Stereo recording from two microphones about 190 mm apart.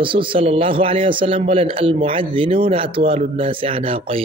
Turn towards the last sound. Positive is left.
turn(degrees=-30)  # may be behind; listen again after turning